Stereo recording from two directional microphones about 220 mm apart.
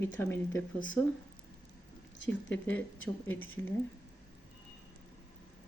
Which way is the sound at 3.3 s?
10° left (ahead or behind).